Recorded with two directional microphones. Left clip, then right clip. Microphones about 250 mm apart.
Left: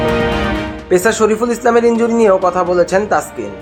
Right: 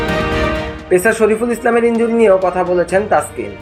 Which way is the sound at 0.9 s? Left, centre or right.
Centre.